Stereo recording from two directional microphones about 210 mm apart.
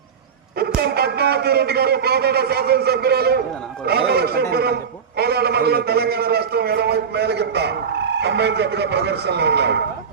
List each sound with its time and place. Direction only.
0.8 s a man's voice: 50° right (ahead or behind)